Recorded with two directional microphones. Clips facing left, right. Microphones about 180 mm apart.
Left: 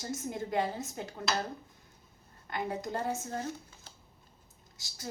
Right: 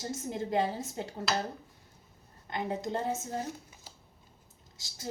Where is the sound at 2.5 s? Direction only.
25° right (ahead or behind).